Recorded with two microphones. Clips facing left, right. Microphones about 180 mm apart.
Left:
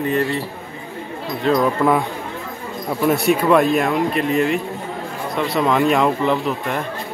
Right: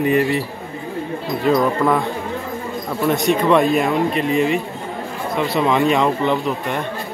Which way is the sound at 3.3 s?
Centre (ahead or behind).